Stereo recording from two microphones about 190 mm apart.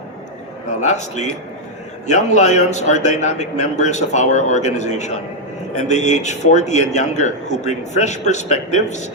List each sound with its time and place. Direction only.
0.8 s speech: 40° left (ahead or behind)